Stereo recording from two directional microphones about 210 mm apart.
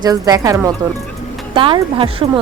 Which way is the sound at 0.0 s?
15° right (ahead or behind).